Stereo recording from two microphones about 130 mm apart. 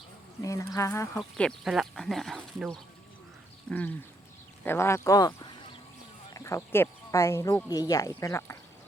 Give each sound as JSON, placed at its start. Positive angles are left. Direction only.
{"t": 0.4, "sound": "speech", "side_deg": 25}
{"t": 1.4, "sound": "speech", "side_deg": 0}
{"t": 3.7, "sound": "duck", "side_deg": 10}
{"t": 4.6, "sound": "speech", "side_deg": 20}